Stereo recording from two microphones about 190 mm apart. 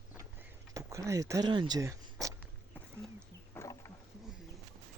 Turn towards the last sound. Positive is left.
turn(degrees=15)  # may be behind; listen again after turning